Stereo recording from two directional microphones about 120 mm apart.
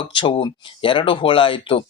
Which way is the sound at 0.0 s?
45° left (ahead or behind).